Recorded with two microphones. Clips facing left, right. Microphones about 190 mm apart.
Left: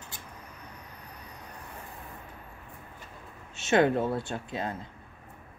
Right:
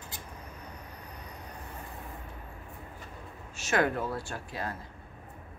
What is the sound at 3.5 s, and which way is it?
A woman's voice, 25° left (ahead or behind).